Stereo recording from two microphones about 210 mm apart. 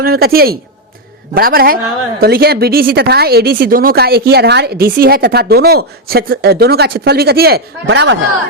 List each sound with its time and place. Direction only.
0.0 s speech: 45° right (ahead or behind)